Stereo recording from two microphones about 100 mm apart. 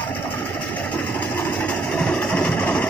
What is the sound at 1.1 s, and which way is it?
Vehicle, 10° left (ahead or behind).